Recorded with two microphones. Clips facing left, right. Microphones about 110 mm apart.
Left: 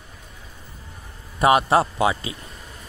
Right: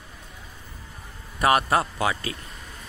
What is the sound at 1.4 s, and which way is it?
Speech, 25° left (ahead or behind).